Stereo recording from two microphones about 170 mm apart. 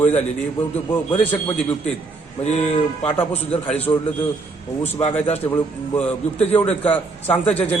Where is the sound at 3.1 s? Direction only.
10° left (ahead or behind).